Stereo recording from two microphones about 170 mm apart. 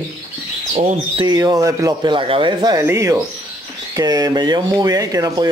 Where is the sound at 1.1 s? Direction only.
25° right (ahead or behind).